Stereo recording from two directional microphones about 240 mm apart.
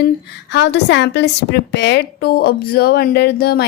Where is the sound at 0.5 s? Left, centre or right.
Left.